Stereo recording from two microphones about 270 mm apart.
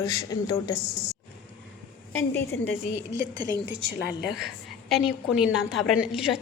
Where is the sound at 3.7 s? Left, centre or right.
Right.